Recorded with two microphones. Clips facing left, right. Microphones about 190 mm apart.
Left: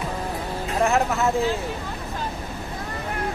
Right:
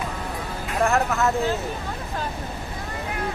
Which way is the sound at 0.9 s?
15° left (ahead or behind).